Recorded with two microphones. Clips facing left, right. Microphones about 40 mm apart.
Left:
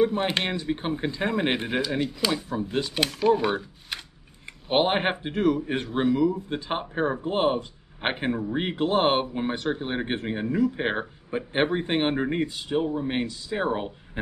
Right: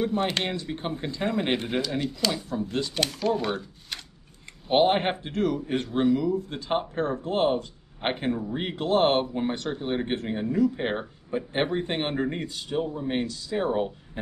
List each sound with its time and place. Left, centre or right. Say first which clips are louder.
0.0 s speech: left 3 dB; centre